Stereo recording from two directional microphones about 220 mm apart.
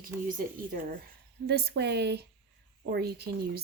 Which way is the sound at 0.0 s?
40° right (ahead or behind).